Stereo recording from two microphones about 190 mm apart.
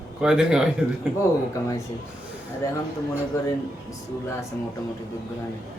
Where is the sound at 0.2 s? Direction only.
5° right (ahead or behind).